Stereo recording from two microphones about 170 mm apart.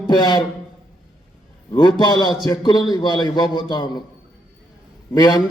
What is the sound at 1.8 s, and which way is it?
A man's voice, 25° left (ahead or behind).